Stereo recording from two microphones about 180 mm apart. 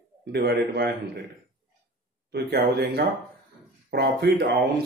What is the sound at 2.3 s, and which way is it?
Speech, 65° right (ahead or behind).